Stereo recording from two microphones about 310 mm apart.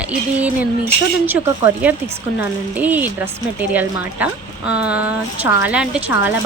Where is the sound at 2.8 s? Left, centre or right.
Centre.